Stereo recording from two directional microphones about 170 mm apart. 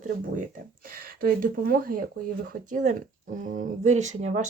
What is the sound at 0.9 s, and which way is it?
Speech, 60° right (ahead or behind).